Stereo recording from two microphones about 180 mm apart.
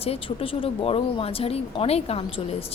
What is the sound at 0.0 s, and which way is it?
A woman's voice, 30° left (ahead or behind).